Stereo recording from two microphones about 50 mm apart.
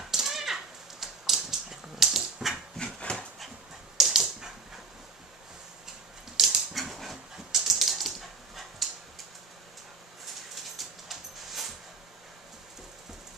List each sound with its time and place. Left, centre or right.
0.1 s a sound: centre
2.8 s dog: centre
4.0 s dog: centre
6.3 s dog: centre
10.5 s dog: centre